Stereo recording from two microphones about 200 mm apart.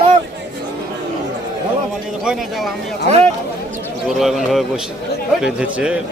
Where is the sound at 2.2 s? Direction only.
Centre (ahead or behind).